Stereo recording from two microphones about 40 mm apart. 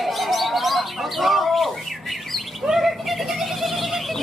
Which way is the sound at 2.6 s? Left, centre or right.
Centre.